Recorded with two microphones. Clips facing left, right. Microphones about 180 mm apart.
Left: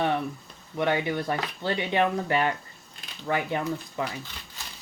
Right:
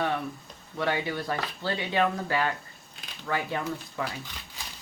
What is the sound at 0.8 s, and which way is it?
Speech, 20° left (ahead or behind).